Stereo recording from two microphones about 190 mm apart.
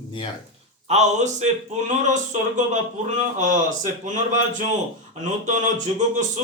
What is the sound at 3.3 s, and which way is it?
Speech, 40° right (ahead or behind).